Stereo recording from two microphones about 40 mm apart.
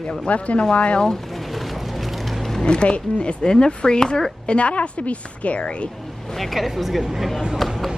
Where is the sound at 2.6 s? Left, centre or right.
Left.